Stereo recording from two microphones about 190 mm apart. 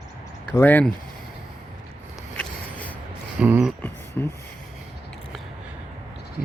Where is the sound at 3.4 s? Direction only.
10° right (ahead or behind).